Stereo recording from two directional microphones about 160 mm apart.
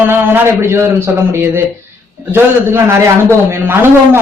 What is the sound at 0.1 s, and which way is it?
A man's voice, 15° right (ahead or behind).